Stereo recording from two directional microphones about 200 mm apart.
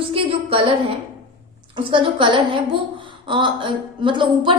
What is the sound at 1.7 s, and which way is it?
A woman's voice, 25° right (ahead or behind).